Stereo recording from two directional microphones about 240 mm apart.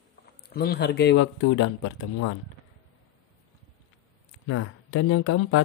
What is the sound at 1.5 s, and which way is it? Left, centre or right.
Speech, left.